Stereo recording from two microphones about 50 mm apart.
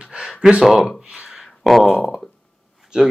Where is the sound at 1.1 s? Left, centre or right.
Centre.